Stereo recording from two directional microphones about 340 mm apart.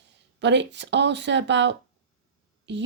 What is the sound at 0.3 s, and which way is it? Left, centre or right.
Speech, right.